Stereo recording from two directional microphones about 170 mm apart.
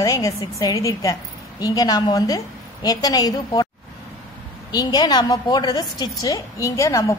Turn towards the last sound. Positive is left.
turn(degrees=15)  # may be behind; listen again after turning